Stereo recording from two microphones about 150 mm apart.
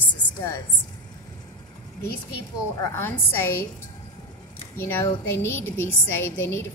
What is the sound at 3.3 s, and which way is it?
Speech, 15° left (ahead or behind).